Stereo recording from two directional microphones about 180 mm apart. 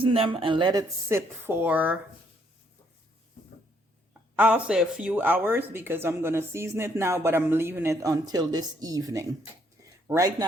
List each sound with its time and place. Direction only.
0.0 s speech: 30° right (ahead or behind); by 2.0 s 10° right (ahead or behind)
4.4 s speech: 10° right (ahead or behind)